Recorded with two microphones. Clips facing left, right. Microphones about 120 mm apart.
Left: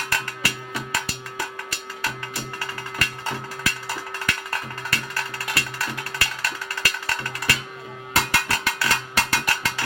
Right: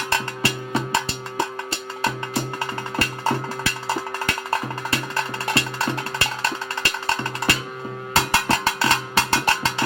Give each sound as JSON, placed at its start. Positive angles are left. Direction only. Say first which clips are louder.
{"t": 0.1, "sound": "music", "louder": "right 7 dB", "side_deg": -25}